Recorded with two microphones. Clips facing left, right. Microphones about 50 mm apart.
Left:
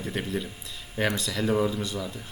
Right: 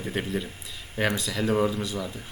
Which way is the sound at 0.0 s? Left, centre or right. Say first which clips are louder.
Right 1 dB; centre.